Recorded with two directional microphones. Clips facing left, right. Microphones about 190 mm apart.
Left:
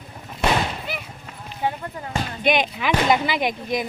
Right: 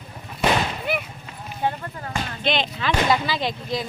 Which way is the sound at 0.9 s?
55° right (ahead or behind).